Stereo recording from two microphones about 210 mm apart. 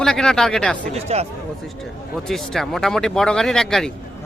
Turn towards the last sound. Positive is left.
turn(degrees=0)  # may be behind; listen again after turning